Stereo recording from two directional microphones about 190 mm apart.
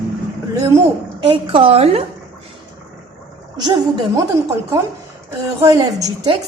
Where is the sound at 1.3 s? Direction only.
30° right (ahead or behind).